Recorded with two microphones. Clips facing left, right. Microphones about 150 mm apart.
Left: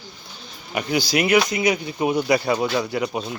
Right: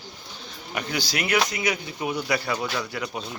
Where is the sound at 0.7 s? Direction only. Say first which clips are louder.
Left 7 dB; 15° left (ahead or behind).